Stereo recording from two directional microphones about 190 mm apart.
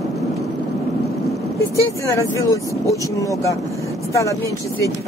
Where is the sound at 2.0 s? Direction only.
15° left (ahead or behind).